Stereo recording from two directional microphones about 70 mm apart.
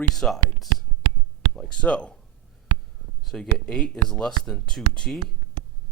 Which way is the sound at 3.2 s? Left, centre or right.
Centre.